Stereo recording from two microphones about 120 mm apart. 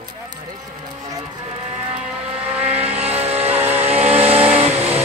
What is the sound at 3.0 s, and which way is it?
Vehicle, 60° right (ahead or behind).